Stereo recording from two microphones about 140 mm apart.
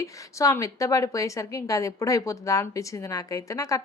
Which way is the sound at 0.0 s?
20° left (ahead or behind).